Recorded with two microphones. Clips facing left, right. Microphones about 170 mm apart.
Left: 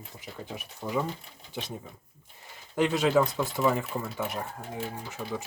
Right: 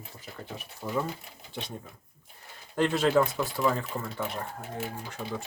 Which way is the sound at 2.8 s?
10° left (ahead or behind).